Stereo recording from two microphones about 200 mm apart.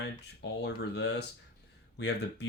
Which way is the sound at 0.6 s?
60° left (ahead or behind).